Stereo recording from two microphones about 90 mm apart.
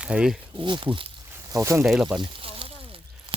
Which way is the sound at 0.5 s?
65° right (ahead or behind).